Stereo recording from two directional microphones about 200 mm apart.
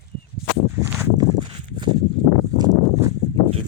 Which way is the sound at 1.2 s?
20° right (ahead or behind).